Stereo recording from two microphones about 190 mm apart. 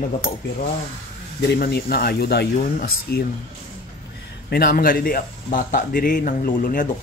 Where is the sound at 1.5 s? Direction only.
55° left (ahead or behind).